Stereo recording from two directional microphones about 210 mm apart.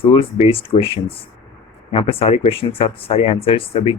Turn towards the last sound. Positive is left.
turn(degrees=25)  # may be behind; listen again after turning